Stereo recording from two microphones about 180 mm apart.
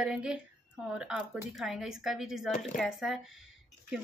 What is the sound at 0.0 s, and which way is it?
A woman's voice, 5° right (ahead or behind).